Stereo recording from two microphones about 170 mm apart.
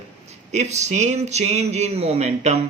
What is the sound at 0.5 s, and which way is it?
Speech, 40° right (ahead or behind).